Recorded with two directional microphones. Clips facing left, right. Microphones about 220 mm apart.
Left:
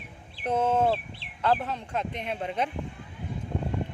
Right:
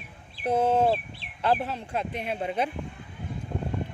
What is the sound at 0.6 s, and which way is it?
Speech, 30° right (ahead or behind).